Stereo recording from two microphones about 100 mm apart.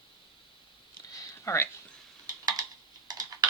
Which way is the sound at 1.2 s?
30° left (ahead or behind).